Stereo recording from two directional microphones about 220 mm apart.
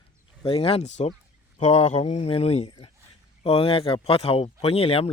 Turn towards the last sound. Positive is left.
turn(degrees=25)  # may be behind; listen again after turning